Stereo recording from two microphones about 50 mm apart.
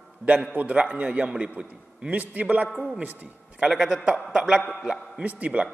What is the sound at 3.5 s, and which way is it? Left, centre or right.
A man's voice, centre.